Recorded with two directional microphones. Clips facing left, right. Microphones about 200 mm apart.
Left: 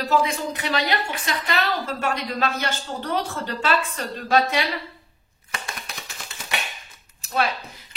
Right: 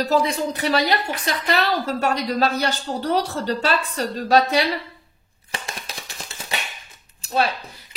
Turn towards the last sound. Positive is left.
turn(degrees=-30)  # may be behind; listen again after turning